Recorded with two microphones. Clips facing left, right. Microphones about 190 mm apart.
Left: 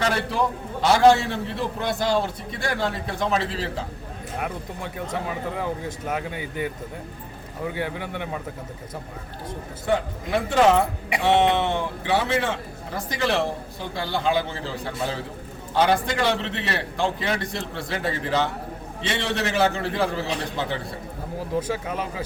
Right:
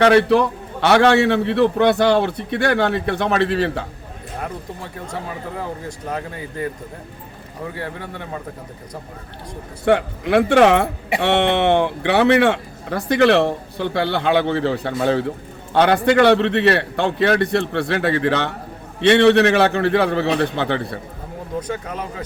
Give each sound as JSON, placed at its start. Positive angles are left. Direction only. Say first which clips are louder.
{"t": 0.0, "sound": "speech", "louder": "right 10 dB", "side_deg": -70}
{"t": 7.9, "sound": "a man's voice", "louder": "even", "side_deg": 5}
{"t": 9.8, "sound": "a man's voice", "louder": "right 7 dB", "side_deg": -70}